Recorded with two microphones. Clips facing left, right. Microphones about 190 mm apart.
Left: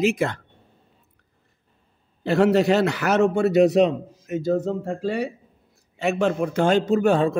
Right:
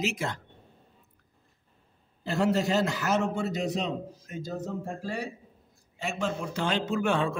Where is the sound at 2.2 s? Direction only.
70° left (ahead or behind).